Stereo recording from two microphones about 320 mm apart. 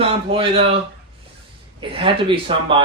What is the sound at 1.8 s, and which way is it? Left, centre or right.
A man's voice, centre.